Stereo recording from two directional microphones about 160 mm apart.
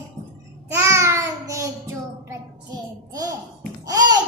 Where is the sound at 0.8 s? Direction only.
15° right (ahead or behind).